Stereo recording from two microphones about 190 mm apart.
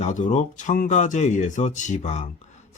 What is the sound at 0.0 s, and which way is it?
Speech, 40° left (ahead or behind).